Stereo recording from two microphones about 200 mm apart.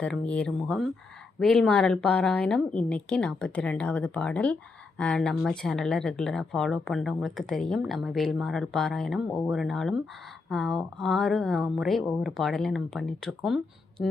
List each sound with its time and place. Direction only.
0.0 s speech: 5° left (ahead or behind)